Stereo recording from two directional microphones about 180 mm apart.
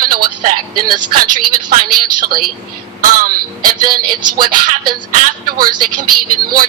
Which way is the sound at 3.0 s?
50° right (ahead or behind).